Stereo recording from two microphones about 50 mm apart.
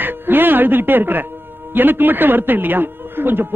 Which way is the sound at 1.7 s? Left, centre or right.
Right.